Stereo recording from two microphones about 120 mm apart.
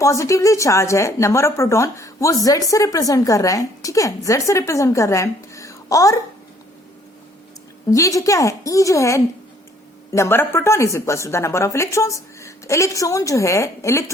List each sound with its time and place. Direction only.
0.0 s a woman's voice: 25° left (ahead or behind)
7.9 s a woman's voice: 25° left (ahead or behind)